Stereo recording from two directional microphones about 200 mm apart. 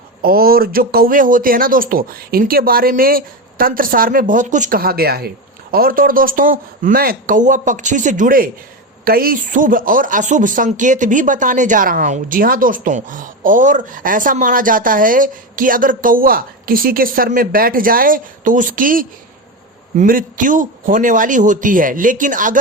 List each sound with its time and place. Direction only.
0.2 s speech: 50° right (ahead or behind)